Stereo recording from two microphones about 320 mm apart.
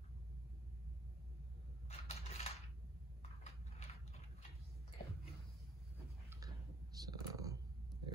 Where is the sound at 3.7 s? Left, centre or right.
Centre.